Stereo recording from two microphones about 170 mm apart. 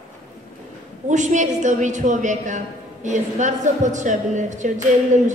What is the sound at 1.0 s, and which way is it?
A woman's voice, 45° right (ahead or behind).